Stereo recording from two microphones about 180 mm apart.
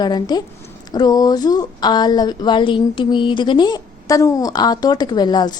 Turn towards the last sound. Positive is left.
turn(degrees=25)  # may be behind; listen again after turning